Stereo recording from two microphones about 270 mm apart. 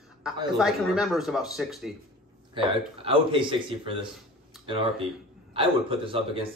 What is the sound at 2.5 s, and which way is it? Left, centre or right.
A man's voice, centre.